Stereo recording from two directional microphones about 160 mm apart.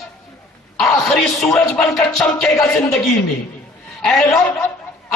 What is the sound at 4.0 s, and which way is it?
Speech, 5° left (ahead or behind).